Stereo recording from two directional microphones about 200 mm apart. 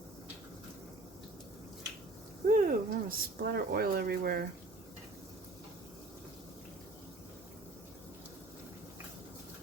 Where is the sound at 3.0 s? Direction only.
50° right (ahead or behind).